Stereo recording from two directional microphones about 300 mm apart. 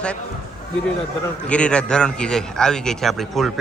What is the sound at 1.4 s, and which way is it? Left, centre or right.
A man's voice, centre.